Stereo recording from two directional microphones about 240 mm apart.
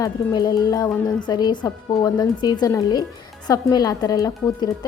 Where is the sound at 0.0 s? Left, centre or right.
Centre.